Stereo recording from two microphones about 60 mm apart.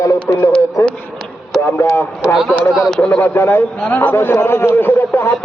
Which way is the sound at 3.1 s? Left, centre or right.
Left.